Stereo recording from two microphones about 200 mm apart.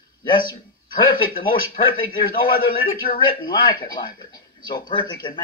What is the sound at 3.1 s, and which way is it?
A man's voice, 25° left (ahead or behind).